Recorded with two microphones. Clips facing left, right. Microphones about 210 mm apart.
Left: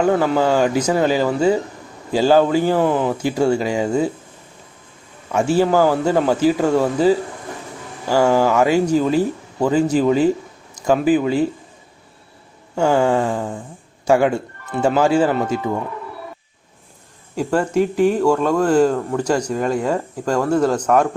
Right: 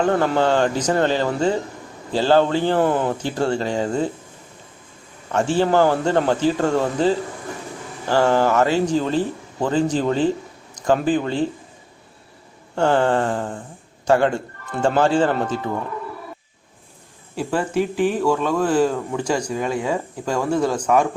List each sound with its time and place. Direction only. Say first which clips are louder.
0.0 s speech: left 2 dB; 5° left (ahead or behind)
5.3 s speech: left 2 dB; 10° left (ahead or behind)
12.7 s speech: left 2 dB; 10° left (ahead or behind)
17.5 s speech: left 4 dB; 5° right (ahead or behind)
17.7 s speech: left 4 dB; 40° left (ahead or behind)
18.3 s speech: left 3 dB; 5° right (ahead or behind)